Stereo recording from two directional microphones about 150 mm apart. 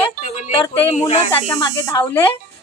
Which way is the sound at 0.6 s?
40° left (ahead or behind).